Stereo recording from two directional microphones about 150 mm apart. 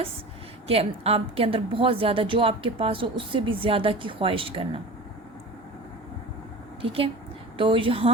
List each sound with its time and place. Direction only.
0.7 s a woman's voice: 40° right (ahead or behind)
6.8 s a woman's voice: 40° right (ahead or behind)